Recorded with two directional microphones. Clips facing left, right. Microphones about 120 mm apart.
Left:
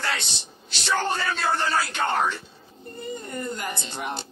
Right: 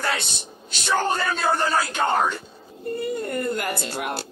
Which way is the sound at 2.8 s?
70° right (ahead or behind).